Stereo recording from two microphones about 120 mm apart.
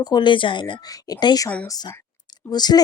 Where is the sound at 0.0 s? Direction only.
35° left (ahead or behind).